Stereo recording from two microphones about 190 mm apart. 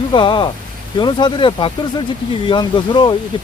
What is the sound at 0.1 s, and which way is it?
Speech, 25° left (ahead or behind).